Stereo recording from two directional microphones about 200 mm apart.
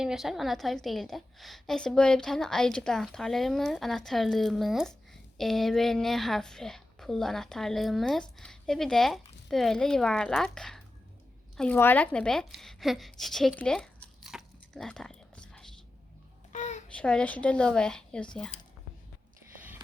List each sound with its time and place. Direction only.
0.0 s a woman's voice: centre (ahead or behind)
16.5 s a sound: 35° left (ahead or behind)
16.9 s a woman's voice: 5° left (ahead or behind)